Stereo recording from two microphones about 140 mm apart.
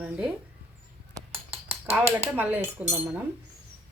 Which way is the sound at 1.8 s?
15° right (ahead or behind).